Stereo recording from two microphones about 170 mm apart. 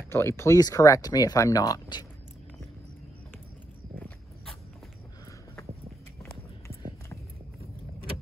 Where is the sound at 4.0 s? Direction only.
10° left (ahead or behind).